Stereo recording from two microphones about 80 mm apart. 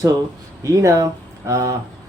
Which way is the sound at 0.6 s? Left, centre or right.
Right.